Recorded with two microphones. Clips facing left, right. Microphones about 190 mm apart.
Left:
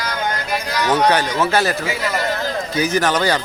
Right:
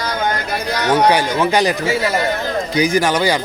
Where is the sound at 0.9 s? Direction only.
10° right (ahead or behind).